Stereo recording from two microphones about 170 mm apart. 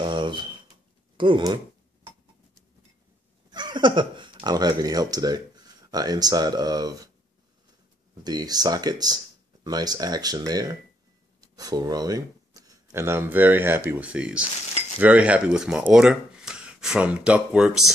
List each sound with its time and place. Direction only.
0.0 s a sound: 30° right (ahead or behind)
1.1 s speech: 30° right (ahead or behind)
3.5 s speech: 25° right (ahead or behind)
8.2 s speech: 25° right (ahead or behind); by 17.9 s 5° right (ahead or behind)